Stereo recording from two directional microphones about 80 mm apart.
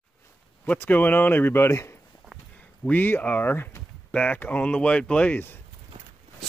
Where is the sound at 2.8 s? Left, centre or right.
Left.